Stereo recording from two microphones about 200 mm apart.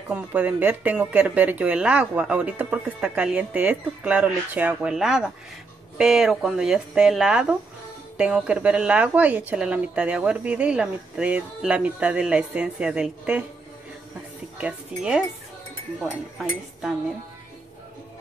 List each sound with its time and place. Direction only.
0.1 s a woman's voice: 5° right (ahead or behind)
14.6 s a woman's voice: 5° right (ahead or behind)